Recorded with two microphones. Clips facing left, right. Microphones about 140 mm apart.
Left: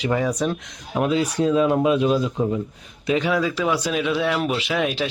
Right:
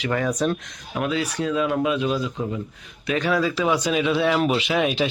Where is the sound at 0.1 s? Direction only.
10° left (ahead or behind).